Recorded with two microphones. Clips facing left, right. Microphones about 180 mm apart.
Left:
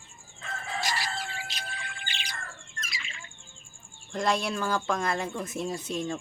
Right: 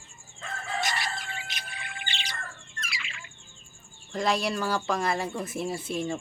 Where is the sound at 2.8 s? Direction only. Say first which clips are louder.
Right 3 dB; 35° left (ahead or behind).